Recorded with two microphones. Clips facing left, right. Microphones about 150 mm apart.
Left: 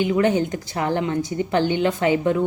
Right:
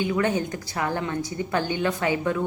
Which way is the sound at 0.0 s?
20° left (ahead or behind).